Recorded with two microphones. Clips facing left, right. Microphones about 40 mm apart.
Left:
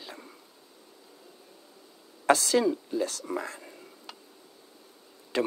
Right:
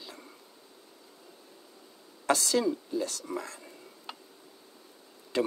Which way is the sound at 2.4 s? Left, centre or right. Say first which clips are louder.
Left 3 dB; centre.